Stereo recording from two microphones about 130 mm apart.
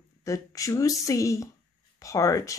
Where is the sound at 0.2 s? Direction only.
25° left (ahead or behind).